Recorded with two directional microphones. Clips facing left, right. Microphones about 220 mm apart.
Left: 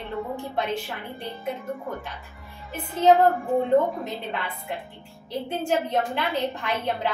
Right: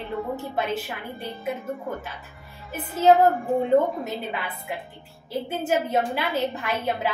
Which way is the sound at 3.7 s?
Centre (ahead or behind).